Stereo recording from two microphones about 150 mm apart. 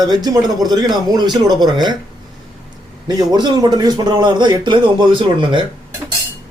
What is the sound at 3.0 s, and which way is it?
A man's voice, 25° right (ahead or behind).